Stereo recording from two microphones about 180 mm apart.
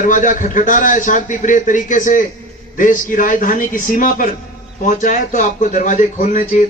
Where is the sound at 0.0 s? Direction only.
45° left (ahead or behind).